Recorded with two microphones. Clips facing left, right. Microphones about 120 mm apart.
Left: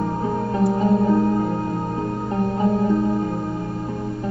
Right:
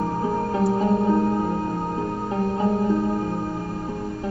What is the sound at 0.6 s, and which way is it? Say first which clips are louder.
Music: left 3 dB; centre (ahead or behind).